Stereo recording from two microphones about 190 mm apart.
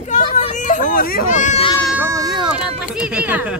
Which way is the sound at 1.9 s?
10° right (ahead or behind).